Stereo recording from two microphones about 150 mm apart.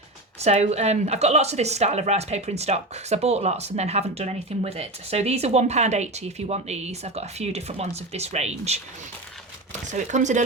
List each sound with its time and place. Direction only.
0.3 s a woman's voice: 45° right (ahead or behind)
9.9 s a woman's voice: 55° right (ahead or behind)